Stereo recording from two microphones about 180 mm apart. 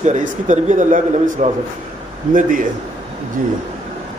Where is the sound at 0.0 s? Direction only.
40° right (ahead or behind).